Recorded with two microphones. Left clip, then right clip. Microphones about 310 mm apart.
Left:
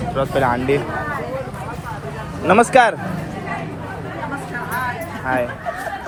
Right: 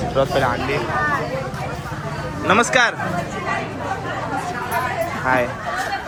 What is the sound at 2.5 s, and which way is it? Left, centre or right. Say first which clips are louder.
Speech: left 3 dB; centre.